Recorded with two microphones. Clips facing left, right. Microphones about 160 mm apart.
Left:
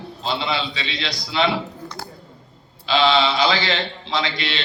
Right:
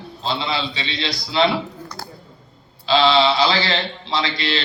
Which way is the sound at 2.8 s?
30° right (ahead or behind).